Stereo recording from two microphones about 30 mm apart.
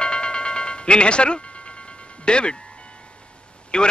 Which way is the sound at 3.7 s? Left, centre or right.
Left.